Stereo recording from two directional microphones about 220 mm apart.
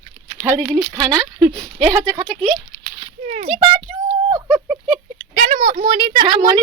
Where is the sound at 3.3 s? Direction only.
30° right (ahead or behind).